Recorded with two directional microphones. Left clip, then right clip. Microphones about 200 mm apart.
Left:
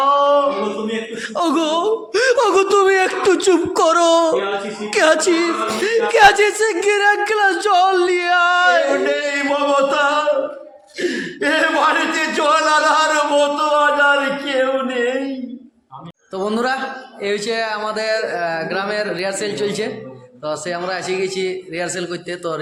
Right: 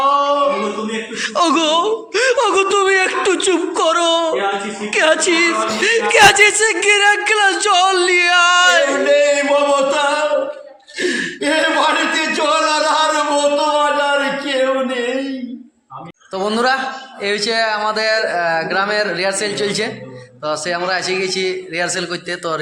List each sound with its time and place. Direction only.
0.0 s male singing: 10° left (ahead or behind)
1.2 s speech: 15° left (ahead or behind)
9.0 s singing: 10° left (ahead or behind)
11.0 s a sound: 5° left (ahead or behind)
16.3 s speech: 5° left (ahead or behind)